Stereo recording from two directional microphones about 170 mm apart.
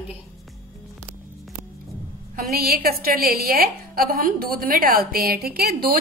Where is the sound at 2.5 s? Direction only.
60° right (ahead or behind).